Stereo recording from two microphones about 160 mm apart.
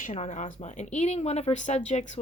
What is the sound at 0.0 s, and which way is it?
Speech, 45° left (ahead or behind).